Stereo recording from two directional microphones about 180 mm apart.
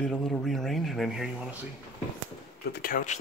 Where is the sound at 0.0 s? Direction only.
5° left (ahead or behind).